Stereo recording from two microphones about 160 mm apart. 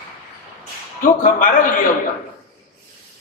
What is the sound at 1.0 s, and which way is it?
Speech, 55° left (ahead or behind).